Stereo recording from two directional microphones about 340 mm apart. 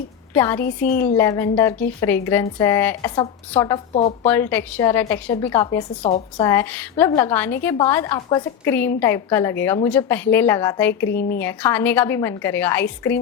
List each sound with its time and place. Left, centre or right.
0.3 s a woman's voice: centre
3.9 s speech: centre
4.3 s a woman's voice: centre
11.1 s speech: left
11.3 s a woman's voice: centre